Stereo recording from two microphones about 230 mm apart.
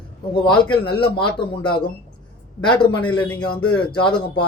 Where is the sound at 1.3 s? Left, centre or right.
Left.